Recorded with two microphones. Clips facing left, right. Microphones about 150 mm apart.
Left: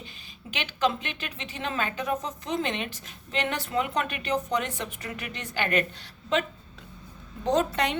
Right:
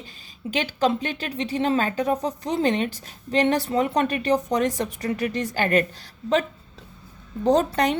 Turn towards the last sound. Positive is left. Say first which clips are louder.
# right 5 dB
turn(degrees=-40)  # may be behind; listen again after turning